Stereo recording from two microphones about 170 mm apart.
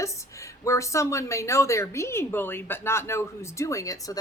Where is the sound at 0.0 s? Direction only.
20° left (ahead or behind).